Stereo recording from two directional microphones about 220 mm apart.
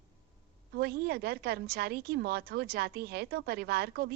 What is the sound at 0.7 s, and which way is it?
A woman's voice, 45° right (ahead or behind).